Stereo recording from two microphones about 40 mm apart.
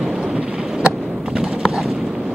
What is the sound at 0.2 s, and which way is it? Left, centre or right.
Thunder, right.